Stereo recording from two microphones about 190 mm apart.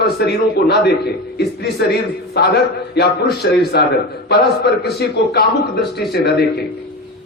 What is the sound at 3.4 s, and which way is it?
Speech, 65° left (ahead or behind).